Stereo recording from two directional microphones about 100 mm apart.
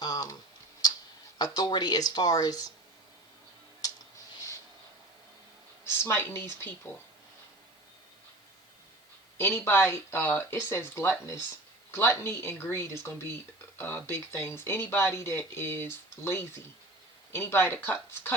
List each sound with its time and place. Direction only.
0.0 s typing: 40° left (ahead or behind)
0.8 s tick-tock: 40° left (ahead or behind)
1.4 s speech: 45° left (ahead or behind)
5.8 s speech: 25° left (ahead or behind)
9.4 s speech: 25° left (ahead or behind)